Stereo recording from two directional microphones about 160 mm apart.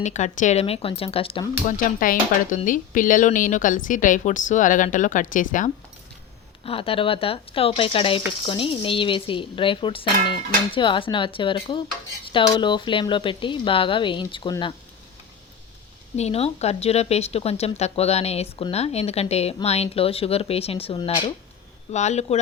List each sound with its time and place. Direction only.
0.0 s speech: 50° left (ahead or behind)
0.6 s speech: 35° left (ahead or behind)
1.6 s a woman's voice: 55° left (ahead or behind)
6.7 s speech: 35° left (ahead or behind)
16.1 s speech: 40° left (ahead or behind)
21.9 s speech: 45° left (ahead or behind)